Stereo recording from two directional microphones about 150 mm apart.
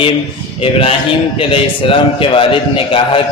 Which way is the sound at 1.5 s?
35° left (ahead or behind).